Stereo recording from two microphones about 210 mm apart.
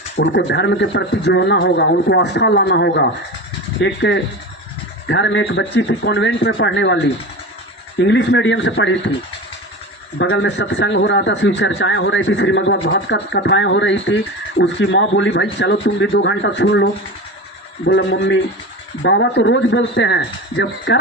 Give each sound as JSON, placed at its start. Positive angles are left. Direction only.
{"t": 0.2, "sound": "speech", "side_deg": 55}
{"t": 10.2, "sound": "speech", "side_deg": 60}